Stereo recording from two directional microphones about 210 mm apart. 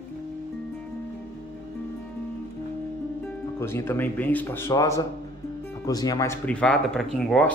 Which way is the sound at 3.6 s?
10° left (ahead or behind).